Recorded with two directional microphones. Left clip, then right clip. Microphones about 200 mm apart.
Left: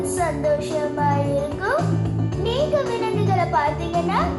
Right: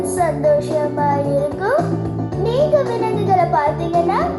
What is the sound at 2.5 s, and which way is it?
Music, 40° right (ahead or behind).